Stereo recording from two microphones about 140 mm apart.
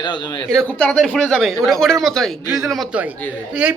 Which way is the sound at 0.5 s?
5° left (ahead or behind).